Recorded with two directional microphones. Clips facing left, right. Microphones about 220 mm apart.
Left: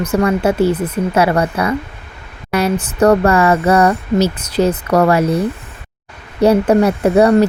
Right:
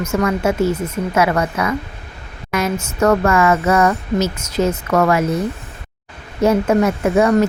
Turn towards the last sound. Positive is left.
turn(degrees=35)  # may be behind; listen again after turning